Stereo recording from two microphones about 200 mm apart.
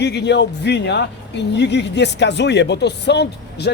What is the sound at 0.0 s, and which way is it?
Speech, 60° left (ahead or behind).